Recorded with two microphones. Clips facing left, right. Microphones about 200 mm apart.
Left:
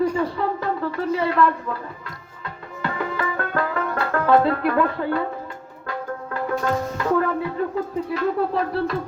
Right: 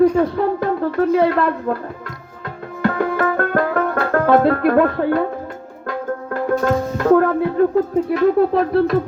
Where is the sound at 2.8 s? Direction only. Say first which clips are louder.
Right 8 dB; 55° right (ahead or behind).